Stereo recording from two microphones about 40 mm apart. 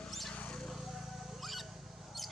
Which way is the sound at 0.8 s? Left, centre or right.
Centre.